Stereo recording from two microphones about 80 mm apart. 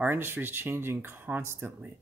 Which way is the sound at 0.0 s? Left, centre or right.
Right.